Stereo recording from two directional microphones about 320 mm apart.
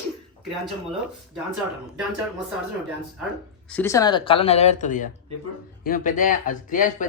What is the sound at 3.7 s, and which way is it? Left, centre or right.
Speech, centre.